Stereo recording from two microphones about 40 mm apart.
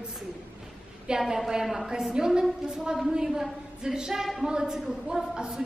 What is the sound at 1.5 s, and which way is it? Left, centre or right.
A woman's voice, centre.